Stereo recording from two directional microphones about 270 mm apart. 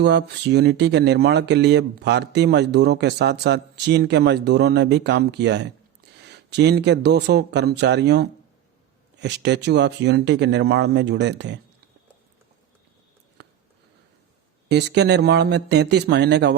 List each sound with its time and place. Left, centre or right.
0.0 s speech: right
14.7 s speech: right